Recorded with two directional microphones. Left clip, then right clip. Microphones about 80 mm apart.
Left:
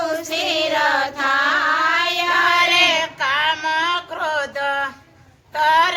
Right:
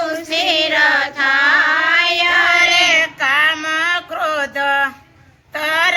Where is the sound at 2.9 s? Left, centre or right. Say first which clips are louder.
Right 5 dB; left.